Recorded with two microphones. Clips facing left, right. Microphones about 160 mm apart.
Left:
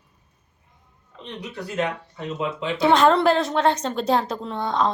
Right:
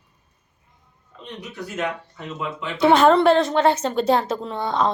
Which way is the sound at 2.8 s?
Centre (ahead or behind).